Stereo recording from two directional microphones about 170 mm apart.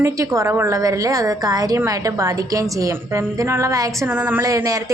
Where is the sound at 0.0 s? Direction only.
20° right (ahead or behind).